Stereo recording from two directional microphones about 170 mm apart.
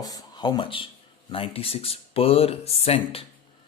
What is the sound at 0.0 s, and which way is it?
Speech, 20° left (ahead or behind).